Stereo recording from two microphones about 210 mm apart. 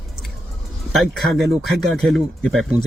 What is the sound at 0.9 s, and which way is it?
Speech, centre (ahead or behind).